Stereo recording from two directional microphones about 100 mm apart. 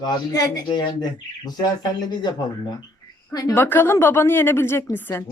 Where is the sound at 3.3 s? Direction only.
40° left (ahead or behind).